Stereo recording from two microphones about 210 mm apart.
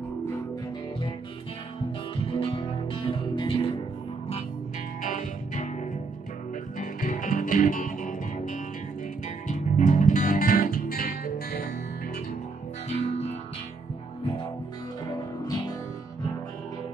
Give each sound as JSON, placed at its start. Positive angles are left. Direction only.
{"t": 2.2, "sound": "music", "side_deg": 25}
{"t": 5.0, "sound": "music", "side_deg": 40}
{"t": 13.0, "sound": "music", "side_deg": 30}